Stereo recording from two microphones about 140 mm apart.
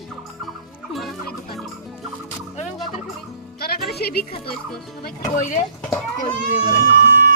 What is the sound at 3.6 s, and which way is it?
Music, 90° left.